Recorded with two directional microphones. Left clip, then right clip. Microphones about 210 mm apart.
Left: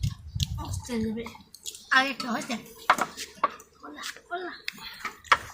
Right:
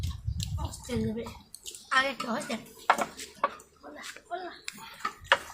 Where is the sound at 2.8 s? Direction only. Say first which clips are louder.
Left 2 dB; 30° left (ahead or behind).